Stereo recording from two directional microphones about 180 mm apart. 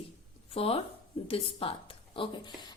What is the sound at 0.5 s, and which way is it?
A woman's voice, 30° left (ahead or behind).